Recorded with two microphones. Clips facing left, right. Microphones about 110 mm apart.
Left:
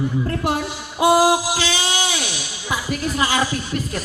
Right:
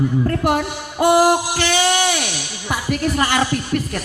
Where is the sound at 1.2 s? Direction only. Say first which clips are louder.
Right 2 dB; 55° right (ahead or behind).